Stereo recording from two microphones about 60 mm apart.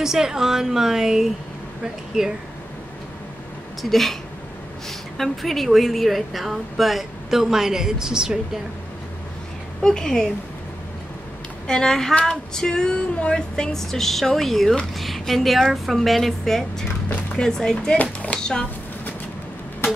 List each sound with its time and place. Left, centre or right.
0.0 s a woman's voice: centre
3.9 s a sound: centre
9.8 s speech: centre
11.6 s speech: centre
12.2 s a sound: centre
17.4 s speech: centre